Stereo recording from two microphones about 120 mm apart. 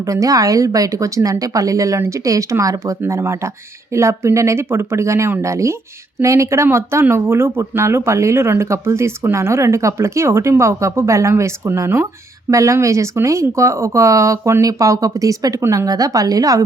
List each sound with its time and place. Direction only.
0.0 s speech: 25° right (ahead or behind)